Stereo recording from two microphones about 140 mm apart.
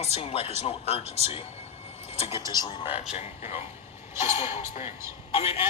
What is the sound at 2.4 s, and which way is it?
Speech, 30° left (ahead or behind).